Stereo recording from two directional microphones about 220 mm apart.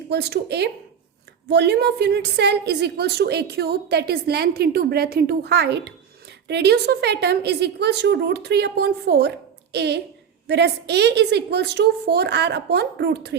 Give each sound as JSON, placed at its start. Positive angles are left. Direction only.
{"t": 0.1, "sound": "a woman's voice", "side_deg": -50}